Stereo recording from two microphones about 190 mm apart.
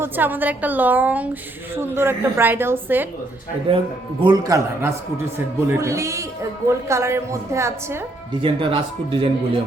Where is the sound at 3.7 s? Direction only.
30° right (ahead or behind).